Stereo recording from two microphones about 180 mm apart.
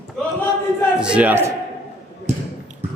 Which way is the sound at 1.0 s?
5° right (ahead or behind).